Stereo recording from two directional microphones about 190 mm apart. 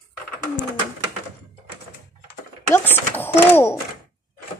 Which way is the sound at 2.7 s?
10° left (ahead or behind).